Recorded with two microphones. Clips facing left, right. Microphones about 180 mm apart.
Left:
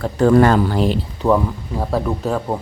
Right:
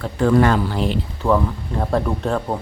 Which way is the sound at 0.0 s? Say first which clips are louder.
Left 3 dB; 40° left (ahead or behind).